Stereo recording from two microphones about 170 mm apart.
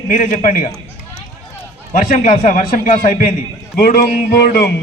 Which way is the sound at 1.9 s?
55° left (ahead or behind).